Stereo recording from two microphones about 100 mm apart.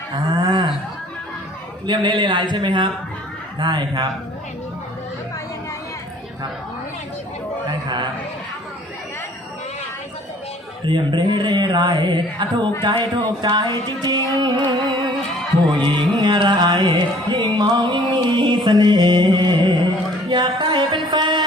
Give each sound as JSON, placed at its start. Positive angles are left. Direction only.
{"t": 0.3, "sound": "a sound", "side_deg": -50}
{"t": 1.9, "sound": "music", "side_deg": -50}
{"t": 7.7, "sound": "music", "side_deg": -50}
{"t": 10.8, "sound": "music", "side_deg": -50}